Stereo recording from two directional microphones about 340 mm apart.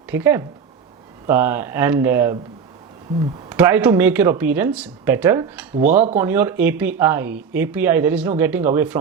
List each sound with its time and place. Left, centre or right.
0.1 s speech: centre
5.7 s speech: right
6.1 s speech: centre